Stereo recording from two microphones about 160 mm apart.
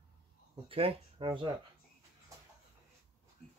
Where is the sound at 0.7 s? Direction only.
35° right (ahead or behind).